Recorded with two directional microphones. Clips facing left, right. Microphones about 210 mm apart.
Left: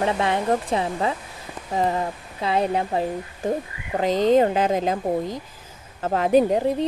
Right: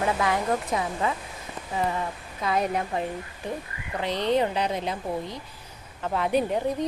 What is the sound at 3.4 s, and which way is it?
Speech, 45° left (ahead or behind).